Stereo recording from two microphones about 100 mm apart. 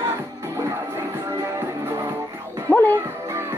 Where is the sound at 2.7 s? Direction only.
20° left (ahead or behind).